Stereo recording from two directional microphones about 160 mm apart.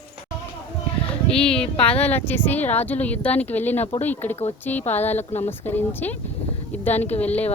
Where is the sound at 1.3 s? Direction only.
5° left (ahead or behind).